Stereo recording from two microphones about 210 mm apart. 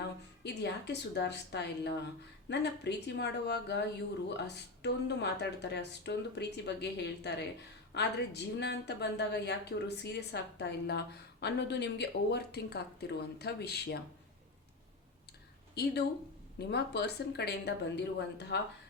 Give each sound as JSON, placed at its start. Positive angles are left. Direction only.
{"t": 0.4, "sound": "a woman's voice", "side_deg": 55}
{"t": 15.7, "sound": "speech", "side_deg": 50}